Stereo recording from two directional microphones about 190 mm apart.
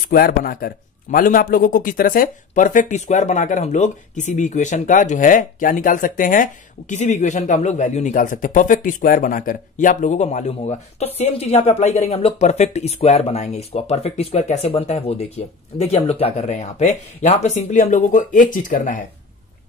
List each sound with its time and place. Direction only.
0.1 s a man's voice: 50° left (ahead or behind)